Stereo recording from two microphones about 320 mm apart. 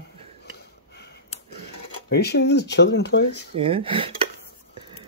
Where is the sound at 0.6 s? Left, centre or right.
Left.